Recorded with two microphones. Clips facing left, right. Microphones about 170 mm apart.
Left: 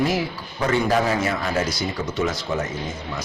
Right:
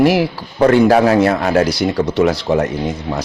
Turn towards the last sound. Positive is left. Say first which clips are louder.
# right 9 dB
turn(degrees=-65)  # may be behind; listen again after turning